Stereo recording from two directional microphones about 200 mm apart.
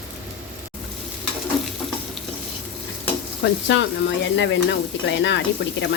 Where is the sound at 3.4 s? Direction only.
65° left (ahead or behind).